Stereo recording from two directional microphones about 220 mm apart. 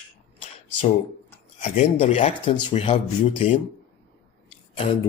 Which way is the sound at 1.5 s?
35° left (ahead or behind).